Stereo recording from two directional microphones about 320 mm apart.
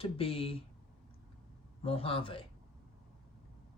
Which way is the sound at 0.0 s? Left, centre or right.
Centre.